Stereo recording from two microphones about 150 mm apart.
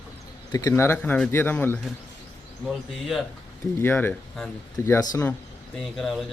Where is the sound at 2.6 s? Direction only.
Centre (ahead or behind).